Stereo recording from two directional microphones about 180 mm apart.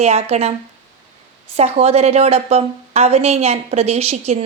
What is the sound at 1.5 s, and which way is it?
A woman's voice, 35° right (ahead or behind).